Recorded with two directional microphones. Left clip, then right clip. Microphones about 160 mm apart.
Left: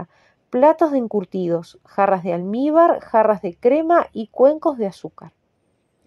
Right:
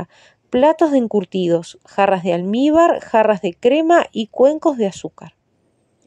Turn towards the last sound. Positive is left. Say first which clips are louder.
# right 4 dB
turn(degrees=-20)  # may be behind; listen again after turning